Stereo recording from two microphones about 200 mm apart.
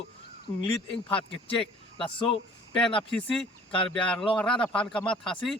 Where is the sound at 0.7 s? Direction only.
25° left (ahead or behind).